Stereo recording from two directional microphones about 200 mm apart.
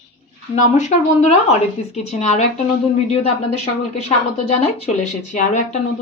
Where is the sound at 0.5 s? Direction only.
35° left (ahead or behind).